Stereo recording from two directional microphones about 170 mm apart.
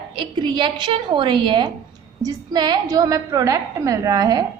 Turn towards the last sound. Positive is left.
turn(degrees=-20)  # may be behind; listen again after turning